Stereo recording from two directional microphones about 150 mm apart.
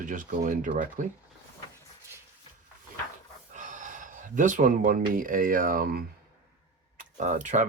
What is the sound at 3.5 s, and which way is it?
Speech, 55° right (ahead or behind).